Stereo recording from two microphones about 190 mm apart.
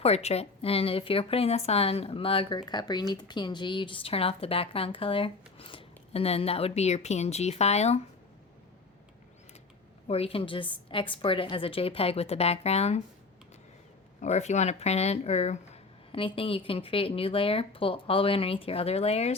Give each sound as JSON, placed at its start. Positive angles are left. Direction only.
{"t": 0.0, "sound": "speech", "side_deg": 35}
{"t": 10.1, "sound": "speech", "side_deg": 30}
{"t": 14.2, "sound": "speech", "side_deg": 35}